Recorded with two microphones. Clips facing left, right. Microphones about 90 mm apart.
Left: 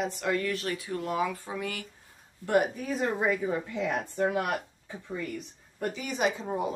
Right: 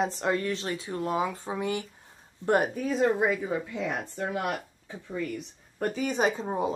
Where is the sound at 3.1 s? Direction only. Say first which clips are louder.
Right 1 dB; 10° right (ahead or behind).